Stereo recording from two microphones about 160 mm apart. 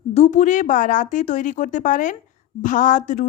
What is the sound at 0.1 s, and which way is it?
A woman's voice, 45° left (ahead or behind).